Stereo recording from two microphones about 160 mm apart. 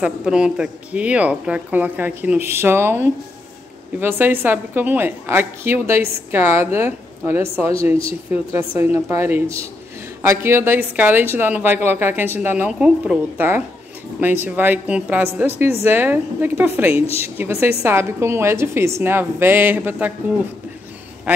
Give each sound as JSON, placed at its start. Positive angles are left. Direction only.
{"t": 0.0, "sound": "a woman's voice", "side_deg": -5}
{"t": 16.9, "sound": "a woman's voice", "side_deg": 40}
{"t": 17.4, "sound": "a woman's voice", "side_deg": -15}